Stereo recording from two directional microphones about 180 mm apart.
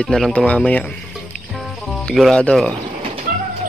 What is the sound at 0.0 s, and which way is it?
Speech, 5° left (ahead or behind).